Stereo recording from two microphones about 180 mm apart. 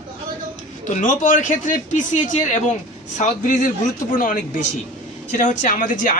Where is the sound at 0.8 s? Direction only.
45° left (ahead or behind).